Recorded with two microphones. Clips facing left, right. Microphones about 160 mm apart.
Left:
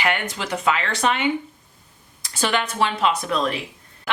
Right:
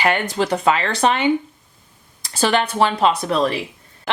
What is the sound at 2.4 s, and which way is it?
Speech, 35° right (ahead or behind).